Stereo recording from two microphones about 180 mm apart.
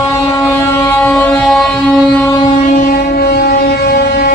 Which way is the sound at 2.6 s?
55° left (ahead or behind).